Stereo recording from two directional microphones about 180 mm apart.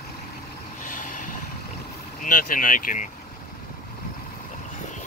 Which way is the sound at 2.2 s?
50° left (ahead or behind).